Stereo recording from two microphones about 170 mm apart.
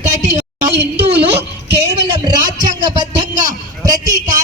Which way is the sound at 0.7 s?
85° right.